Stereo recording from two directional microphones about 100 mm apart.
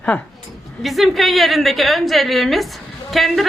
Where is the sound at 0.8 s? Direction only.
Centre (ahead or behind).